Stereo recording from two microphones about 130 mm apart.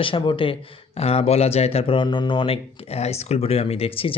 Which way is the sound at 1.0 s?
55° left (ahead or behind).